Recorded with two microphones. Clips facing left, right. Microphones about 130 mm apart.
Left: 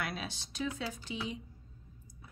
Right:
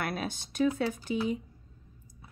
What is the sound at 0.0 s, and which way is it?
Speech, 50° right (ahead or behind).